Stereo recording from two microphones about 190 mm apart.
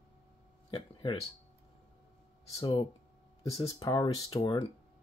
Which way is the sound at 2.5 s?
20° left (ahead or behind).